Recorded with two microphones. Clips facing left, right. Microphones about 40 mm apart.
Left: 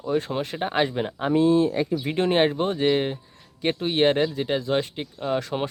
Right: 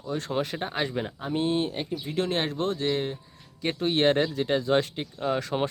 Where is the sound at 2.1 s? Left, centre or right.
Centre.